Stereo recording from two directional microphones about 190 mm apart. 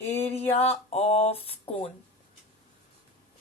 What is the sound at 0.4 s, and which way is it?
A woman's voice, 35° left (ahead or behind).